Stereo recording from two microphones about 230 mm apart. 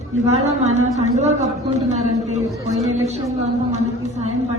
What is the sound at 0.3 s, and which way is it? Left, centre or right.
A woman's voice, right.